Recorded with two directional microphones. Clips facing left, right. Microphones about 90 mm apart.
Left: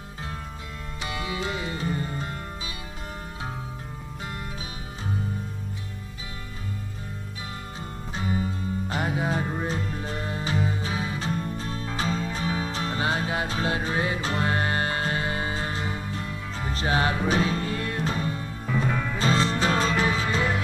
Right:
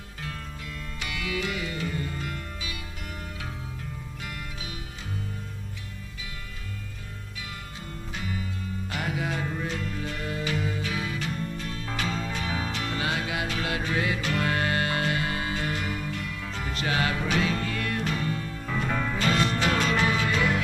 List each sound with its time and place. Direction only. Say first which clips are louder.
1.0 s music: left 1 dB; 30° left (ahead or behind)
8.1 s music: left 6 dB; 30° left (ahead or behind)